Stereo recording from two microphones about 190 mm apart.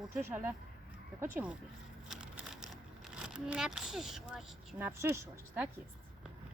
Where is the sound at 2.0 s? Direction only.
5° right (ahead or behind).